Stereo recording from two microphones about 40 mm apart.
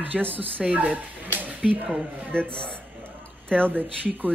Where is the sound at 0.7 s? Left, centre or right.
Right.